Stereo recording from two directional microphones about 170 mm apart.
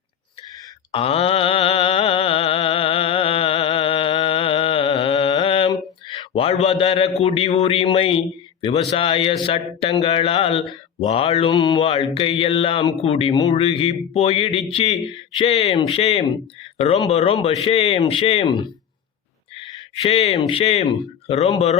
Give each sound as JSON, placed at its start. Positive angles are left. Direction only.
{"t": 0.9, "sound": "music", "side_deg": 35}
{"t": 5.7, "sound": "a man's voice", "side_deg": 30}
{"t": 20.0, "sound": "a man's voice", "side_deg": 35}